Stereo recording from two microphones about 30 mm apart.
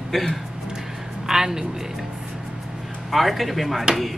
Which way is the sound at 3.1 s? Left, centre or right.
Centre.